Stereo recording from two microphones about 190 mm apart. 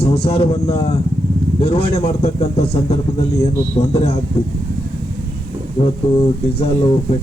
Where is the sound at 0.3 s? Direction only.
30° left (ahead or behind).